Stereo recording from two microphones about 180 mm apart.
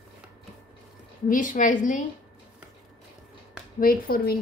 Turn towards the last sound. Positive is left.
turn(degrees=55)  # may be behind; listen again after turning